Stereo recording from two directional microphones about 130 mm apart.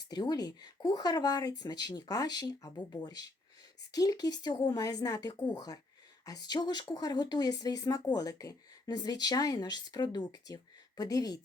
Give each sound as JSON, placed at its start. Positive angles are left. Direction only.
{"t": 0.0, "sound": "speech", "side_deg": 30}